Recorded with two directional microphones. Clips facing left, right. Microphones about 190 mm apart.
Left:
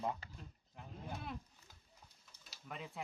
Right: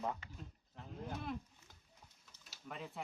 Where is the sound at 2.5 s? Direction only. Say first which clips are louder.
Right 1 dB; centre (ahead or behind).